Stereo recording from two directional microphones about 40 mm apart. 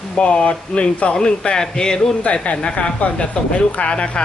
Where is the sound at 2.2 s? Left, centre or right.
Left.